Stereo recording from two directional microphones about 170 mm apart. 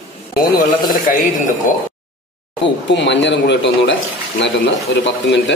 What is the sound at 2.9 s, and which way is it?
Speech, 90° left.